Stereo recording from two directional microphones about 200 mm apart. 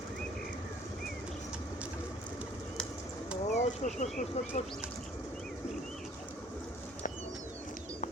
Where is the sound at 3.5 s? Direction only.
40° left (ahead or behind).